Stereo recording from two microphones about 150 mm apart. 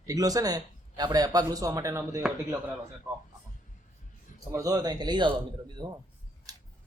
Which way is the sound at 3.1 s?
Centre (ahead or behind).